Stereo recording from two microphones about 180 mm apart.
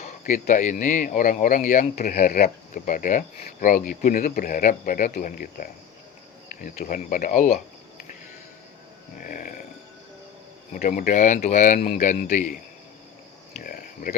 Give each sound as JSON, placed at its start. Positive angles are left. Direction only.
{"t": 0.0, "sound": "speech", "side_deg": 45}
{"t": 9.1, "sound": "speech", "side_deg": 50}
{"t": 10.8, "sound": "speech", "side_deg": 50}
{"t": 13.5, "sound": "a sound", "side_deg": 50}